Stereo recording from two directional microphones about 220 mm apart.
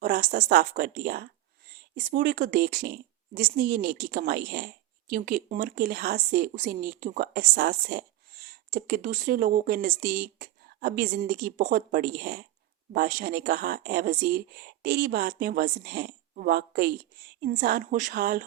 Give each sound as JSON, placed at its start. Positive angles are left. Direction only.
{"t": 0.0, "sound": "speech", "side_deg": -40}